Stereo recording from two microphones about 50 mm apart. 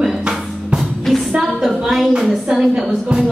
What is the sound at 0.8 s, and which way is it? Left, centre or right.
Music, centre.